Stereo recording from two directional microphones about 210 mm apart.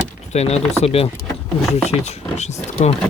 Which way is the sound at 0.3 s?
30° left (ahead or behind).